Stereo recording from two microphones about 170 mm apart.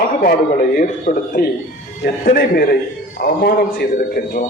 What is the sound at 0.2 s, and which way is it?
A man's voice, 60° left (ahead or behind).